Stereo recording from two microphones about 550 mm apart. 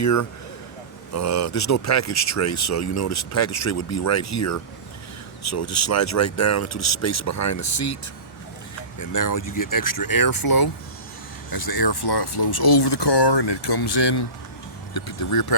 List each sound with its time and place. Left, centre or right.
0.0 s speech: left
9.0 s speech: left